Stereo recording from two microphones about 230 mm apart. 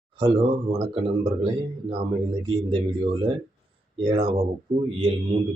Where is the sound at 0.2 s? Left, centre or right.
Right.